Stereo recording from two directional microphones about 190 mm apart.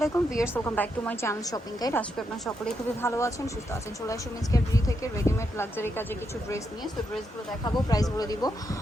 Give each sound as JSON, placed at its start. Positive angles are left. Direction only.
{"t": 0.0, "sound": "a woman's voice", "side_deg": 15}
{"t": 7.6, "sound": "speech", "side_deg": 20}